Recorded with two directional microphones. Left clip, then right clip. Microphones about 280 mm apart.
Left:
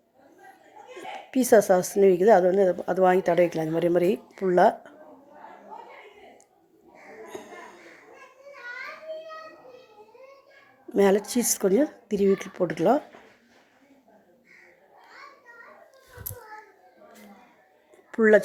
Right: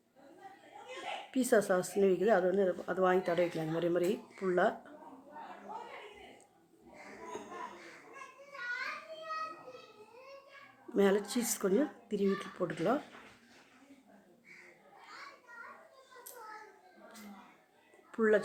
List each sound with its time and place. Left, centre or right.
1.3 s a woman's voice: left
7.3 s a sound: centre
10.9 s a woman's voice: left
18.1 s speech: left